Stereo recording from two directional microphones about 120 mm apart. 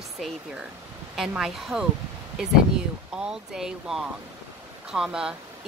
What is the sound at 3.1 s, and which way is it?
Speech, 5° right (ahead or behind).